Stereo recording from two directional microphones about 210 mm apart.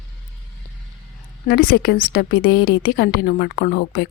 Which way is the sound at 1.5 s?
45° left (ahead or behind).